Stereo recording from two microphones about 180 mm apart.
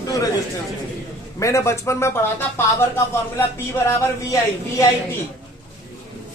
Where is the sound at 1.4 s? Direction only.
15° left (ahead or behind).